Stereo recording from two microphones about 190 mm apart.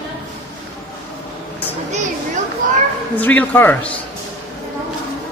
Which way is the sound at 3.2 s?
10° left (ahead or behind).